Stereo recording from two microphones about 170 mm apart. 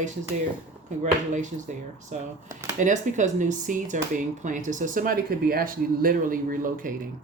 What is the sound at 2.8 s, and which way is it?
Speech, 45° right (ahead or behind).